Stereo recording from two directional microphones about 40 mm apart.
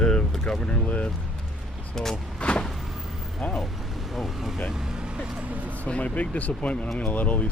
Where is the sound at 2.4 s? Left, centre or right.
Left.